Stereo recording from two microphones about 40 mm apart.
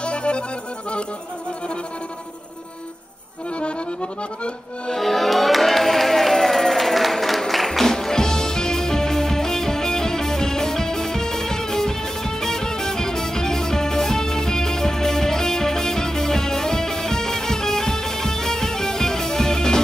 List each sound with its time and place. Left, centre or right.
0.0 s accordion: left
3.5 s accordion: left
4.8 s music: centre